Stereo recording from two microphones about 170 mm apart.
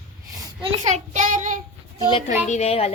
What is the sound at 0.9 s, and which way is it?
Child singing, 45° right (ahead or behind).